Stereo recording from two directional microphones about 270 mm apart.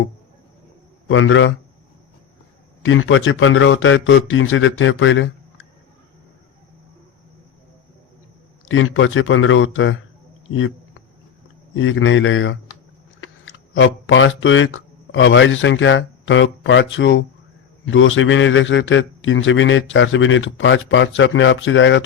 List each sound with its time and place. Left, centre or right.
1.0 s a man's voice: left
2.8 s a man's voice: left
8.6 s a man's voice: left
11.7 s a man's voice: left